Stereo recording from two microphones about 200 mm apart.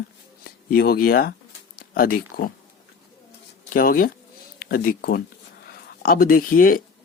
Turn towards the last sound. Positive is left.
turn(degrees=45)  # may be behind; listen again after turning